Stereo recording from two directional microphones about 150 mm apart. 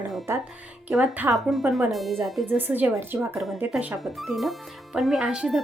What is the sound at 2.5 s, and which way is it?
Speech, 10° right (ahead or behind).